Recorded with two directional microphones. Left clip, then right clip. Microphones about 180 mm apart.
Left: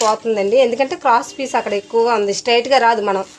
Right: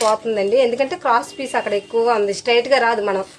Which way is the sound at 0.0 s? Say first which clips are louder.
Left 1 dB; 30° left (ahead or behind).